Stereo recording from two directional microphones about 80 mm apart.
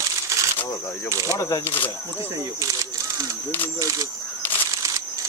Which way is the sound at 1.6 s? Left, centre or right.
Left.